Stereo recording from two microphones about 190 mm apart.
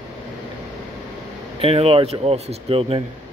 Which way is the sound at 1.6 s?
30° right (ahead or behind).